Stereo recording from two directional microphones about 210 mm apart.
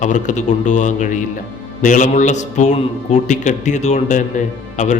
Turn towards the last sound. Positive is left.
turn(degrees=35)  # may be behind; listen again after turning